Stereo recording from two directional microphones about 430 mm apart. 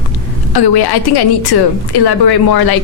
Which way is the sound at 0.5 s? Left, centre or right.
Left.